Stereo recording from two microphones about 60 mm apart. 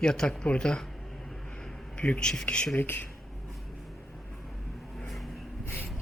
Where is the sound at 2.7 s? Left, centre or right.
Left.